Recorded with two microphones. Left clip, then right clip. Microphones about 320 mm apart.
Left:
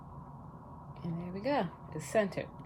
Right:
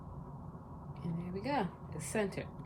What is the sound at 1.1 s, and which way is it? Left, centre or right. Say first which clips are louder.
A woman's voice: left 3 dB; left.